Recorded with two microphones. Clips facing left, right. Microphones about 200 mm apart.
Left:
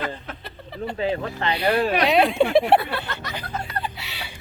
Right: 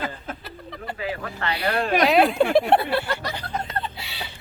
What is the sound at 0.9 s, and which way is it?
Speech, 25° left (ahead or behind).